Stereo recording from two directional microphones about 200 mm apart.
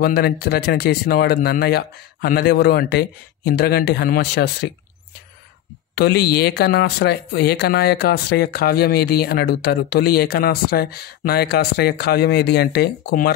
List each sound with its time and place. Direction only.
0.0 s speech: 50° left (ahead or behind)
5.9 s speech: 55° left (ahead or behind)